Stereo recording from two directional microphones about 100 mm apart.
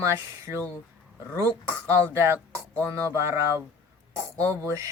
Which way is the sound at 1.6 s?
30° right (ahead or behind).